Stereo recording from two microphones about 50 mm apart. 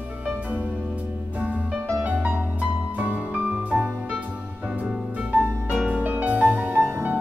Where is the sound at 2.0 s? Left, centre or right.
Right.